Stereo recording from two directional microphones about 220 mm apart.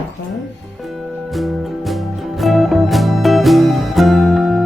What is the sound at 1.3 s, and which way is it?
Music, centre (ahead or behind).